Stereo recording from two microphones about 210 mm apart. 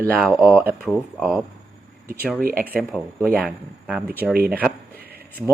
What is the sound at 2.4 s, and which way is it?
Speech, 45° right (ahead or behind).